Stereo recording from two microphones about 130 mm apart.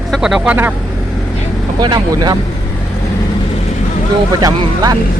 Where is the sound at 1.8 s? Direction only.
30° right (ahead or behind).